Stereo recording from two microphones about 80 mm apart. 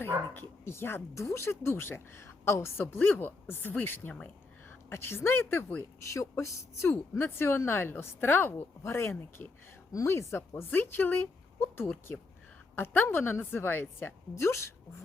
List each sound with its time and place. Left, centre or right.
0.6 s a woman's voice: left
10.5 s speech: left